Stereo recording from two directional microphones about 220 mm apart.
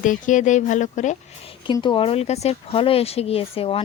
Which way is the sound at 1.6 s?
20° left (ahead or behind).